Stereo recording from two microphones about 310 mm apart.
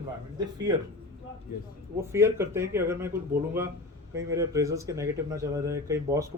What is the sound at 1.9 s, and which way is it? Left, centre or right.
Speech, centre.